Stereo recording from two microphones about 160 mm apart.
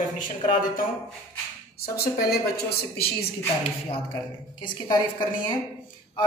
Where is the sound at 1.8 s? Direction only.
70° left (ahead or behind).